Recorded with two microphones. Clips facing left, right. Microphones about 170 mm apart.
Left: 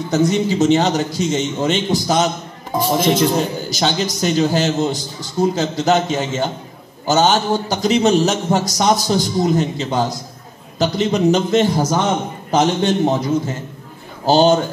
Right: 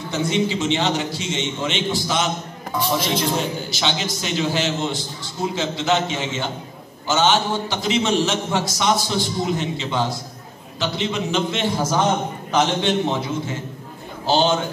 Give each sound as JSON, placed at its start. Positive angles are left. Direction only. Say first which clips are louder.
{"t": 0.1, "sound": "a man's voice", "louder": "left 5 dB", "side_deg": 40}